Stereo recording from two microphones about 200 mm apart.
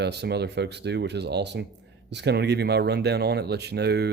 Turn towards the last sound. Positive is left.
turn(degrees=-55)  # may be behind; listen again after turning